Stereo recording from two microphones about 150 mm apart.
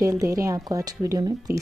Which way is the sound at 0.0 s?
20° right (ahead or behind).